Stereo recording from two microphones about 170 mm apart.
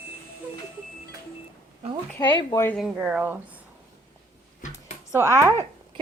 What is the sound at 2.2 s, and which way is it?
Speech, 25° left (ahead or behind).